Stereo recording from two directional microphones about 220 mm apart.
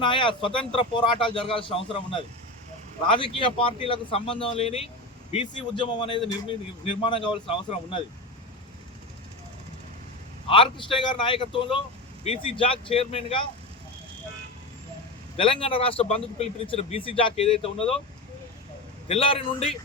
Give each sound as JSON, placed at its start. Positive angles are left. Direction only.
{"t": 0.0, "sound": "a man's voice", "side_deg": 20}
{"t": 10.4, "sound": "a man's voice", "side_deg": 20}
{"t": 15.4, "sound": "a man's voice", "side_deg": 25}
{"t": 19.0, "sound": "a man's voice", "side_deg": 25}